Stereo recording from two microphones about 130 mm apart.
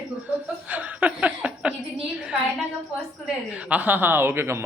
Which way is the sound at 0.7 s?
10° right (ahead or behind).